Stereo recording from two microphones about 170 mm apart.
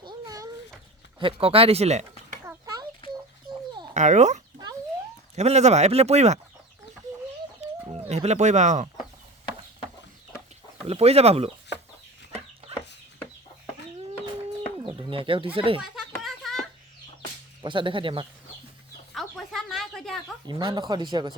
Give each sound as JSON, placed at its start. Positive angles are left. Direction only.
{"t": 0.0, "sound": "a sound", "side_deg": -25}
{"t": 1.2, "sound": "speech", "side_deg": -35}
{"t": 2.4, "sound": "a sound", "side_deg": -20}
{"t": 3.9, "sound": "a child's voice", "side_deg": -45}
{"t": 5.4, "sound": "speech", "side_deg": -40}
{"t": 7.9, "sound": "speech", "side_deg": -35}
{"t": 10.8, "sound": "speech", "side_deg": -35}
{"t": 14.8, "sound": "bird", "side_deg": -30}
{"t": 15.5, "sound": "speech", "side_deg": -30}
{"t": 16.2, "sound": "a sound", "side_deg": 0}
{"t": 17.6, "sound": "speech", "side_deg": -30}
{"t": 19.1, "sound": "a sound", "side_deg": 0}
{"t": 20.5, "sound": "speech", "side_deg": -25}